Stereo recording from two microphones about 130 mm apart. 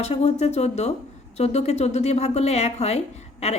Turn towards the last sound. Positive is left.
turn(degrees=55)  # may be behind; listen again after turning